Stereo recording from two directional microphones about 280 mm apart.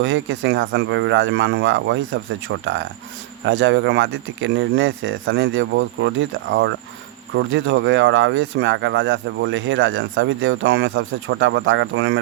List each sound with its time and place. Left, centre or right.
0.0 s speech: right